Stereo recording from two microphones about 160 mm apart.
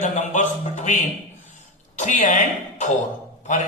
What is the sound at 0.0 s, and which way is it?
Speech, 50° left (ahead or behind).